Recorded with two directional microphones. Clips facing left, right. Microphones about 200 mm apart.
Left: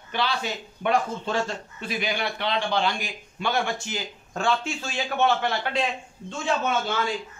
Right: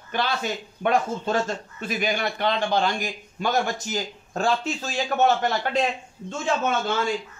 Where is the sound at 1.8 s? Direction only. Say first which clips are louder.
Right 3 dB; 45° right (ahead or behind).